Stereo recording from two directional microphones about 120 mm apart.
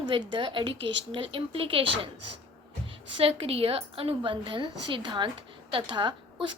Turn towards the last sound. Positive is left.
turn(degrees=-45)  # may be behind; listen again after turning